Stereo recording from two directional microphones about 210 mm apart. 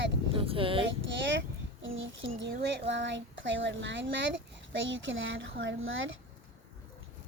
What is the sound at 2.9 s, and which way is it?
A woman's voice, 60° right (ahead or behind).